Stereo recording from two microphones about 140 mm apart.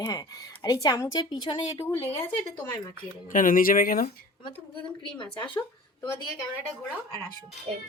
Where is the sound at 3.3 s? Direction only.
75° left (ahead or behind).